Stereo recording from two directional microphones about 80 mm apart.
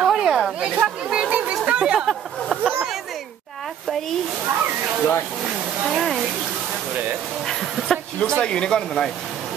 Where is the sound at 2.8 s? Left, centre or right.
Centre.